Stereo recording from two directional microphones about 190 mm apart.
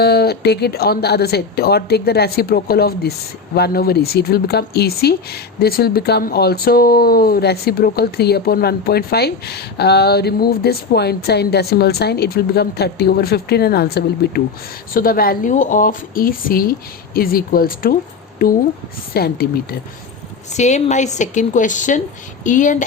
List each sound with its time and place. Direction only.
0.0 s a woman's voice: 55° left (ahead or behind)
20.5 s a woman's voice: 35° left (ahead or behind)